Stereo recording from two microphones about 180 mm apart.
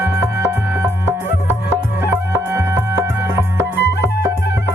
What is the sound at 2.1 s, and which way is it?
Music, 10° right (ahead or behind).